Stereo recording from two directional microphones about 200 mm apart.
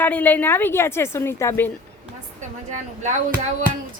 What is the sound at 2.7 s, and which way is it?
Speech, 40° right (ahead or behind).